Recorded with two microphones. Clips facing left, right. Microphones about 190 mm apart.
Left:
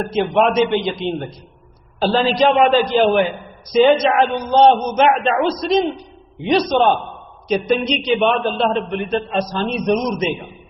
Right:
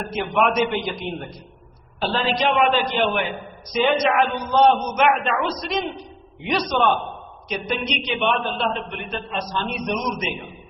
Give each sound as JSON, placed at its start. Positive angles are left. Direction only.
{"t": 0.1, "sound": "a man's voice", "side_deg": 30}
{"t": 2.0, "sound": "a man's voice", "side_deg": 35}